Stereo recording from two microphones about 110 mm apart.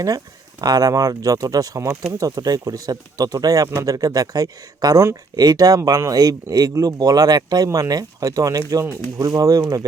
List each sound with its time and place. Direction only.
0.6 s speech: 35° right (ahead or behind)